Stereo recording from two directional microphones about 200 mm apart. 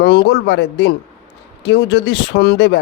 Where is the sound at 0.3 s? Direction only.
60° left (ahead or behind).